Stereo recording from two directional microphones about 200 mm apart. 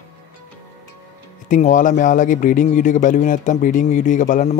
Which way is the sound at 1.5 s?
40° left (ahead or behind).